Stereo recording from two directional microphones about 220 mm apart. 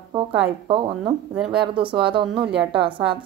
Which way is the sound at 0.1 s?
20° right (ahead or behind).